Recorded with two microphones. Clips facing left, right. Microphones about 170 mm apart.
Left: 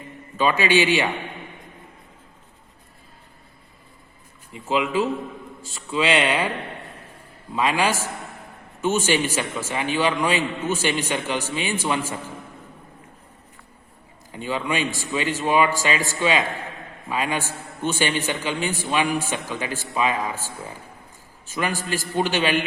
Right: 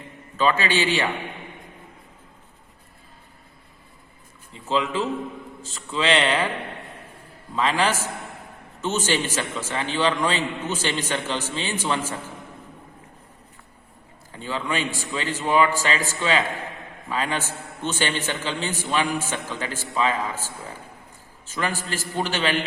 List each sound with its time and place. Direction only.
0.3 s a man's voice: 15° left (ahead or behind)
4.5 s a man's voice: 10° left (ahead or behind)
7.5 s a man's voice: 10° left (ahead or behind)
14.3 s a man's voice: 15° left (ahead or behind)